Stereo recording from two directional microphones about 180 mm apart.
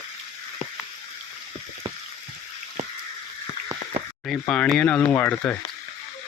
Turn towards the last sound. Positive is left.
turn(degrees=10)  # may be behind; listen again after turning